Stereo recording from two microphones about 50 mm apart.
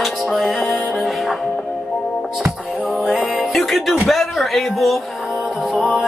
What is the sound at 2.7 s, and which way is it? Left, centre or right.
Music, centre.